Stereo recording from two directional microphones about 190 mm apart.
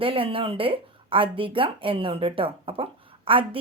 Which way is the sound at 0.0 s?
30° right (ahead or behind).